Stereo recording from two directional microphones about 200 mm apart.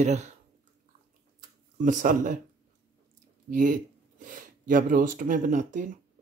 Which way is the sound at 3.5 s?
40° right (ahead or behind).